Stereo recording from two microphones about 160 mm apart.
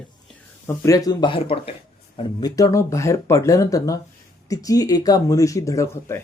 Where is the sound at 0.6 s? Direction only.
15° left (ahead or behind); by 1.7 s 35° left (ahead or behind).